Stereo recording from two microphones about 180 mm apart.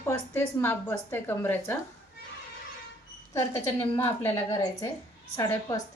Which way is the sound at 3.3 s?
15° left (ahead or behind).